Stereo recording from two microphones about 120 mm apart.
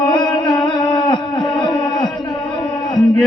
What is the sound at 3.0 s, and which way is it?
Music, 15° left (ahead or behind).